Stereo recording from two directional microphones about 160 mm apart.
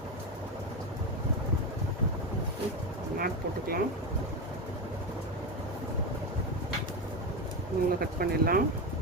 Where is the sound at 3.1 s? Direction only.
65° right (ahead or behind).